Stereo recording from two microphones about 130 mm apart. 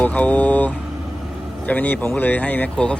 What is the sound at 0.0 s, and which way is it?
Speech, 10° left (ahead or behind).